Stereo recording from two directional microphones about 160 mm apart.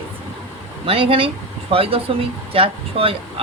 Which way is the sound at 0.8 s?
35° right (ahead or behind).